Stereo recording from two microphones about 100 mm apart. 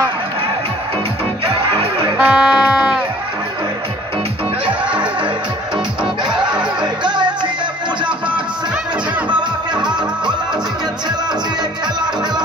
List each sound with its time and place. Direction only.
2.1 s music: 10° right (ahead or behind)
6.3 s music: 50° right (ahead or behind)